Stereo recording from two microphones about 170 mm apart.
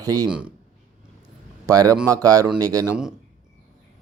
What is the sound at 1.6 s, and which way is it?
Speech, 20° right (ahead or behind).